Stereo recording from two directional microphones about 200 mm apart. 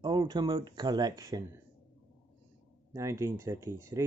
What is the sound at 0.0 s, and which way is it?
Speech, 20° right (ahead or behind).